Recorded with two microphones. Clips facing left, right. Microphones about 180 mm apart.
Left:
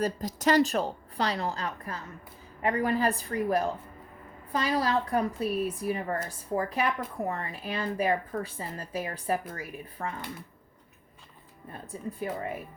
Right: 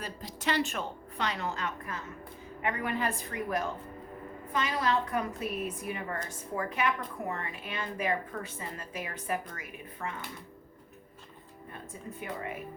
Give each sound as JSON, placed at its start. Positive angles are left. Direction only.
{"t": 0.0, "sound": "speech", "side_deg": 40}
{"t": 12.2, "sound": "speech", "side_deg": 35}